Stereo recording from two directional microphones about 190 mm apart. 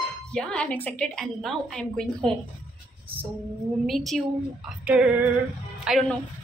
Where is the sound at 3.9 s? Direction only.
Centre (ahead or behind).